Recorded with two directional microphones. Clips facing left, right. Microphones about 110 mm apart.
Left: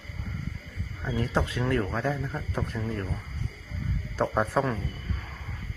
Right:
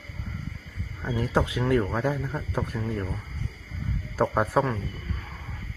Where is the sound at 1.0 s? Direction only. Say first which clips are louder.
Right 2 dB; 15° right (ahead or behind).